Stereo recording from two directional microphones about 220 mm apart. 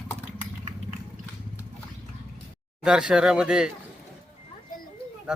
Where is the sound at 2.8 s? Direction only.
5° right (ahead or behind).